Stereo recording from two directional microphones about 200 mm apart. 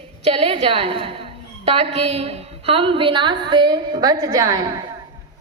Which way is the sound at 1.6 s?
30° right (ahead or behind).